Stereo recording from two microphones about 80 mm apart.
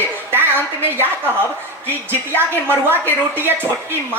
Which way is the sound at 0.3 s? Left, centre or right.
Right.